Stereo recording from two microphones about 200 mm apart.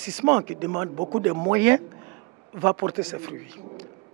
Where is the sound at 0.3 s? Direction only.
20° right (ahead or behind).